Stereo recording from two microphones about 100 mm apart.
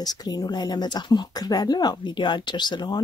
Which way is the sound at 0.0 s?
40° left (ahead or behind).